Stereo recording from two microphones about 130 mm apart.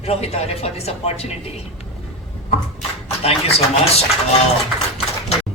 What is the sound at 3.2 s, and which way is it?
Speech, 50° left (ahead or behind).